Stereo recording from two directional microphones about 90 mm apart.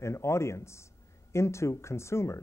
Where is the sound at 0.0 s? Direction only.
30° left (ahead or behind).